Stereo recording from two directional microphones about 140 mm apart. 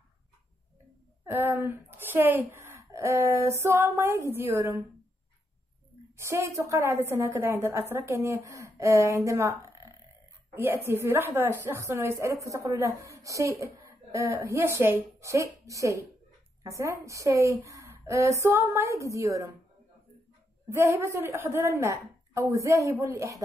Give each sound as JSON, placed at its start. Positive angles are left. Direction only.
{"t": 1.2, "sound": "a woman's voice", "side_deg": -15}
{"t": 6.1, "sound": "a woman's voice", "side_deg": -20}
{"t": 20.6, "sound": "a woman's voice", "side_deg": -20}